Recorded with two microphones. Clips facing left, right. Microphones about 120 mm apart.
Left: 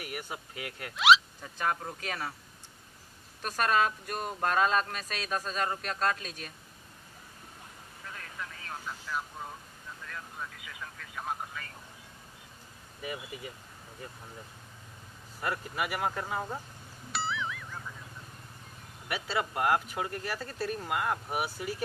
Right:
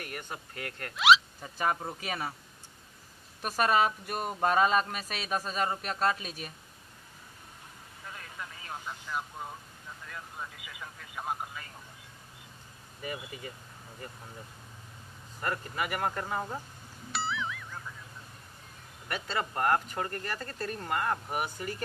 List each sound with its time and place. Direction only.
0.0 s speech: 10° left (ahead or behind); by 2.3 s 10° right (ahead or behind)
3.4 s speech: 5° right (ahead or behind)
8.4 s vehicle: 10° right (ahead or behind)
10.0 s speech: 10° right (ahead or behind)
13.0 s speech: 5° left (ahead or behind)
15.4 s speech: 5° left (ahead or behind)
17.1 s music: centre (ahead or behind)
19.0 s speech: 5° left (ahead or behind)